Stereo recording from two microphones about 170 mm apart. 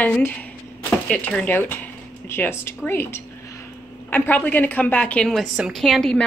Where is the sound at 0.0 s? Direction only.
10° left (ahead or behind).